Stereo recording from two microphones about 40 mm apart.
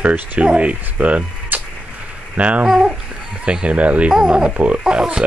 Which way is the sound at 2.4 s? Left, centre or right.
Right.